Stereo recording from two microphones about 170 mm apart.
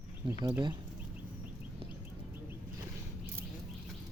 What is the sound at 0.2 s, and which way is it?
Speech, 30° right (ahead or behind).